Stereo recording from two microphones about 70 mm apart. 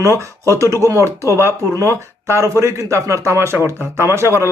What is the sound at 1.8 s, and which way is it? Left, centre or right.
A man's voice, right.